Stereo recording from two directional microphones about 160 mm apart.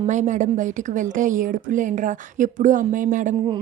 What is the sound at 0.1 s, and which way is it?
A woman's voice, 50° right (ahead or behind).